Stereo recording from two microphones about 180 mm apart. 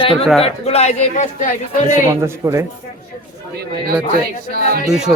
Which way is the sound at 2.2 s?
15° right (ahead or behind).